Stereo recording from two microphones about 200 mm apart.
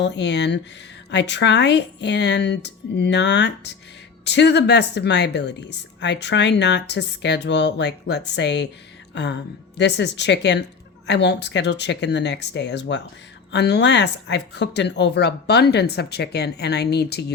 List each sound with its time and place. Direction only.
0.0 s a woman's voice: 60° left (ahead or behind)